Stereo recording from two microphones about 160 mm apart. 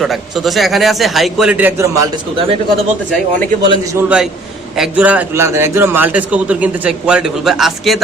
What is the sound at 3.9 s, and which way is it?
A man's voice, 10° right (ahead or behind).